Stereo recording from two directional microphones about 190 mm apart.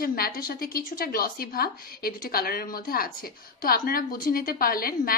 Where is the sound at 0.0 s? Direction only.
50° left (ahead or behind).